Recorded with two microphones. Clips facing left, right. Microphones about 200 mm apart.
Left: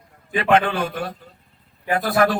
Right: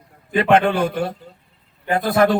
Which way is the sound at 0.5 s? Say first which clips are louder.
Right 2 dB; 30° right (ahead or behind).